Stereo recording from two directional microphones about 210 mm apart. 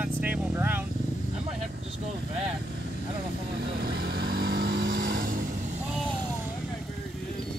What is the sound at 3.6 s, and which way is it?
Vehicle, 50° right (ahead or behind).